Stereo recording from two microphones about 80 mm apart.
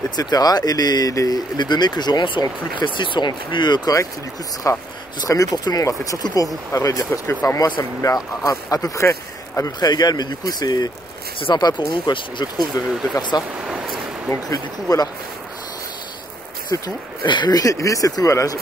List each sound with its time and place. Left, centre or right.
0.1 s speech: left
1.6 s speech: left
4.7 s speech: left
7.1 s speech: left
8.5 s speech: left
11.9 s speech: left
12.7 s speech: left
13.6 s a sound: centre
14.5 s speech: left
16.7 s speech: left
17.3 s speech: left
17.6 s speech: left